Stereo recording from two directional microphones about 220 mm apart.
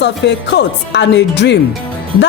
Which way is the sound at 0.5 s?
50° left (ahead or behind).